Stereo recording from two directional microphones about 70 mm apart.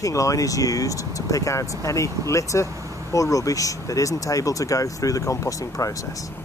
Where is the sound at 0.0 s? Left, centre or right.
Left.